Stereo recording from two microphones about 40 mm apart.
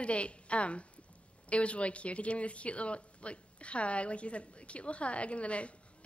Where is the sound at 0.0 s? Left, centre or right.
Left.